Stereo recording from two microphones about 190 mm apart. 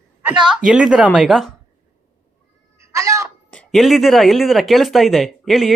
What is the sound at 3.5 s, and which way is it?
Speech, 5° left (ahead or behind).